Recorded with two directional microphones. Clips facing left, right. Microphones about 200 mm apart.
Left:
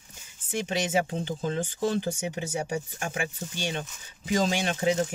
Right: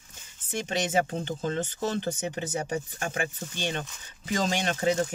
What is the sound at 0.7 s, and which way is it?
Speech, 10° left (ahead or behind).